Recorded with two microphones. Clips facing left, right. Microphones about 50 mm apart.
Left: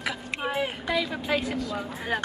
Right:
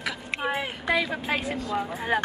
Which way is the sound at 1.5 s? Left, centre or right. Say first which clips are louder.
Right 2 dB; right.